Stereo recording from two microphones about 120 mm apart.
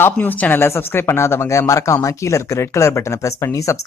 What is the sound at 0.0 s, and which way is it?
A man's voice, 15° left (ahead or behind).